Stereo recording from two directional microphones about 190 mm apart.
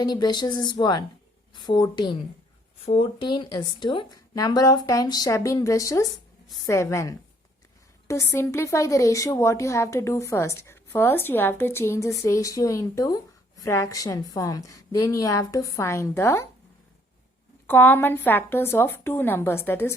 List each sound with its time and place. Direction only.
0.0 s a woman's voice: 20° left (ahead or behind)
17.7 s speech: 10° left (ahead or behind)